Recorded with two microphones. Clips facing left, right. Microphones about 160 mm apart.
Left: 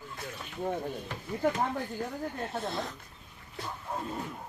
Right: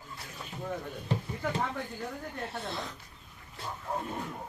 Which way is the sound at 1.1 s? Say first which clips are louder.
Right 8 dB; 30° right (ahead or behind).